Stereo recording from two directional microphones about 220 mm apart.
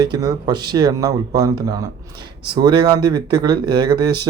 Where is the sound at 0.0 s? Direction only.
20° right (ahead or behind).